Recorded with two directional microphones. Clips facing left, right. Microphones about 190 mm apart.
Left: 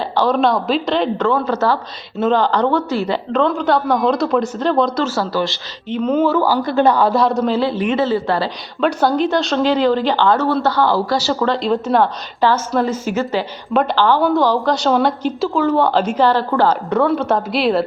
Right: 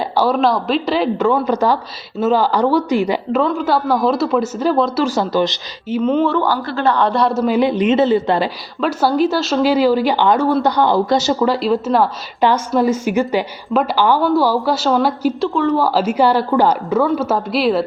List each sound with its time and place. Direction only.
0.0 s speech: 10° right (ahead or behind)
3.4 s speech: 5° right (ahead or behind)
5.0 s a man's voice: 20° right (ahead or behind)
5.9 s a woman's voice: centre (ahead or behind); by 7.0 s 15° left (ahead or behind)
7.0 s speech: centre (ahead or behind)
7.5 s a man's voice: 15° right (ahead or behind)
8.8 s speech: 5° right (ahead or behind)
12.4 s a woman's voice: 15° right (ahead or behind)
16.9 s speech: centre (ahead or behind)